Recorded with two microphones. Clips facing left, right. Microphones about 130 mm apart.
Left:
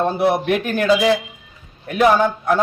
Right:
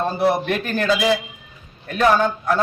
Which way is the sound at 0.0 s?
10° left (ahead or behind).